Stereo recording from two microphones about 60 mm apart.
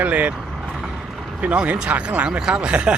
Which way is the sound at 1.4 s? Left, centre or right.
Right.